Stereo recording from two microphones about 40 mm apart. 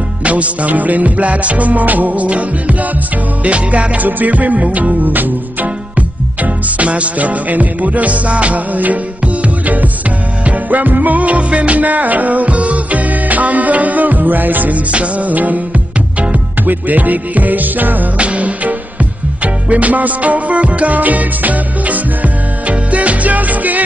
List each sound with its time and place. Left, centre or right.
0.2 s music: right
3.4 s music: right
10.4 s music: right
14.9 s music: right
16.6 s music: right
18.1 s music: right